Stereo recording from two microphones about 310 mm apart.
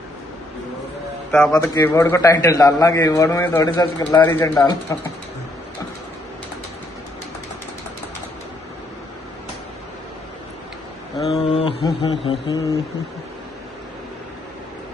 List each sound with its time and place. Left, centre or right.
1.3 s a man's voice: centre
11.2 s a man's voice: centre